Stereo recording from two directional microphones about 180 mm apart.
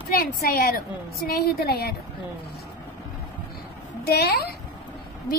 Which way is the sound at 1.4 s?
60° left (ahead or behind).